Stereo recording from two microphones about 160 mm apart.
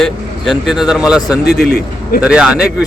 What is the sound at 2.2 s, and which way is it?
Speech, 5° right (ahead or behind).